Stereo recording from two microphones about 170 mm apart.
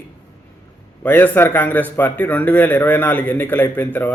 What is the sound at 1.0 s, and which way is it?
A man's voice, 10° left (ahead or behind).